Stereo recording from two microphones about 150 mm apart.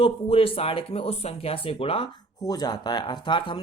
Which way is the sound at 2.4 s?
25° left (ahead or behind).